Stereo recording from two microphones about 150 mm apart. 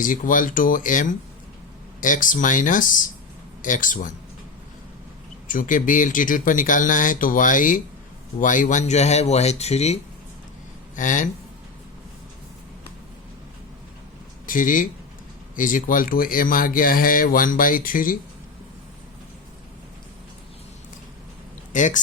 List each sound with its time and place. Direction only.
0.0 s speech: 60° left (ahead or behind)
5.5 s speech: 60° left (ahead or behind); by 10.0 s 45° left (ahead or behind)
10.9 s speech: 60° left (ahead or behind)
14.4 s speech: 65° left (ahead or behind)
21.7 s speech: 55° left (ahead or behind)